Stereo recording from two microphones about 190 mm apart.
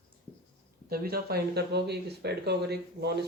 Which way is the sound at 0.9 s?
55° right (ahead or behind).